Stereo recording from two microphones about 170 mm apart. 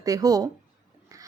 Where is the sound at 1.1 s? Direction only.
20° right (ahead or behind).